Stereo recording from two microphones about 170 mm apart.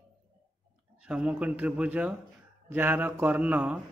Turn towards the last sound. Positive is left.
turn(degrees=-10)  # may be behind; listen again after turning